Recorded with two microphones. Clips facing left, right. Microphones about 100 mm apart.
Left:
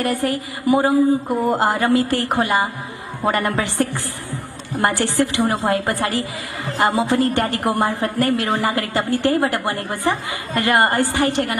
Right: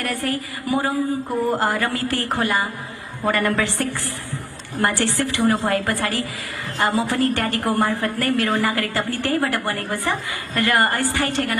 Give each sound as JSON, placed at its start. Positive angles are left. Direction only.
{"t": 0.0, "sound": "a woman's voice", "side_deg": 20}